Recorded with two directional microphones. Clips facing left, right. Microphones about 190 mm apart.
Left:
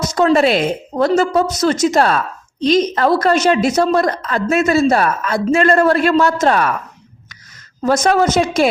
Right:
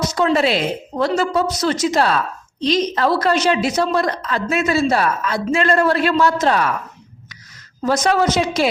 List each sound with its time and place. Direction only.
0.1 s a woman's voice: 45° left (ahead or behind)
7.9 s a woman's voice: 50° left (ahead or behind)